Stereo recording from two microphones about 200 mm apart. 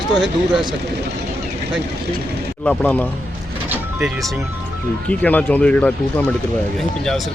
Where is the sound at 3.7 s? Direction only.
Centre (ahead or behind).